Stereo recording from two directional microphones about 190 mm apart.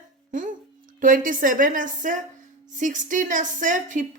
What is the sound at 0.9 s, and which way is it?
Speech, 45° right (ahead or behind).